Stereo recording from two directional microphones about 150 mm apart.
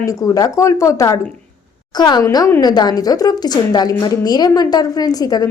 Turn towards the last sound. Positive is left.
turn(degrees=25)  # may be behind; listen again after turning